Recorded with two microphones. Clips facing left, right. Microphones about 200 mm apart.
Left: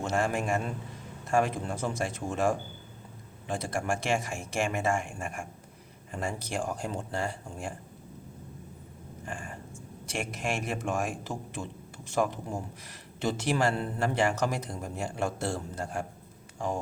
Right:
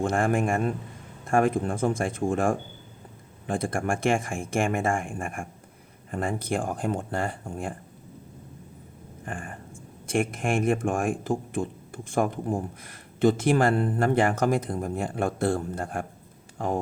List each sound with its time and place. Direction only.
0.0 s speech: 55° right (ahead or behind)
9.2 s speech: 55° right (ahead or behind)